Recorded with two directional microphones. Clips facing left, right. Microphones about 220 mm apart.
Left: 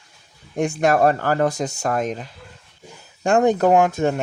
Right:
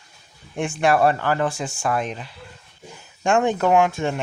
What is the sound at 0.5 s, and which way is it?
Speech, 40° left (ahead or behind).